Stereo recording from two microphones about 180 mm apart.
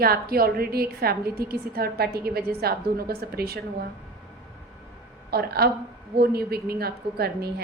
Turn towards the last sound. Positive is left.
turn(degrees=-60)  # may be behind; listen again after turning